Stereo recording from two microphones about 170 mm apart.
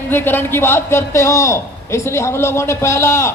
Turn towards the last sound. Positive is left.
turn(degrees=15)  # may be behind; listen again after turning